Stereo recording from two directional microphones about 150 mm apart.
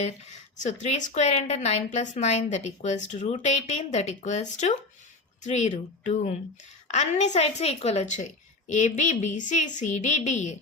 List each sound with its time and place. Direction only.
0.3 s a woman's voice: 55° left (ahead or behind)